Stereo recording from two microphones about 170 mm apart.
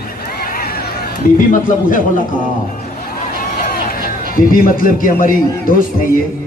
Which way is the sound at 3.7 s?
60° left (ahead or behind).